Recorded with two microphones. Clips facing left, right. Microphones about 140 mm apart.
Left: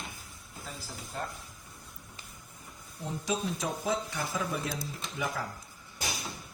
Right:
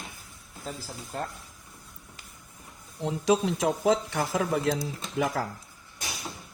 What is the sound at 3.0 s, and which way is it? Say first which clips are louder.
Speech: right 9 dB; 90° right.